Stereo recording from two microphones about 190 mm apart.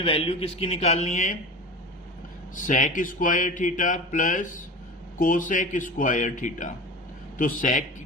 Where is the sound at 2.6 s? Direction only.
40° left (ahead or behind).